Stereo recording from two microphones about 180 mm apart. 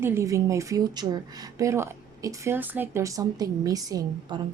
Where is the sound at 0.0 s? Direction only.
15° right (ahead or behind).